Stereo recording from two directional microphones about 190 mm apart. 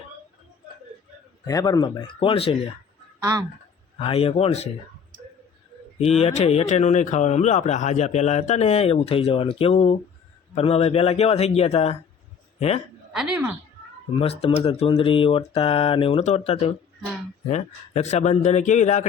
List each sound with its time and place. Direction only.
1.5 s speech: 20° left (ahead or behind)
3.9 s speech: 30° left (ahead or behind)
6.0 s a man's voice: 35° left (ahead or behind)
13.1 s a sound: 5° right (ahead or behind)
14.2 s speech: 30° left (ahead or behind)